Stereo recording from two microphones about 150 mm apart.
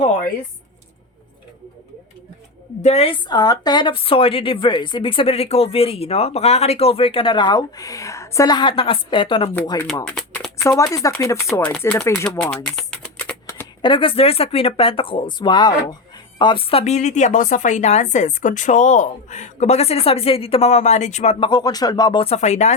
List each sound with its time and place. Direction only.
2.8 s speech: 40° left (ahead or behind)
3.2 s a woman's voice: 25° left (ahead or behind)
9.8 s speech: centre (ahead or behind)
10.6 s speech: 20° left (ahead or behind)
12.4 s typing: 5° left (ahead or behind)
13.8 s speech: 35° left (ahead or behind); by 21.3 s 50° left (ahead or behind)
21.4 s speech: 30° left (ahead or behind)
22.2 s speech: 45° left (ahead or behind)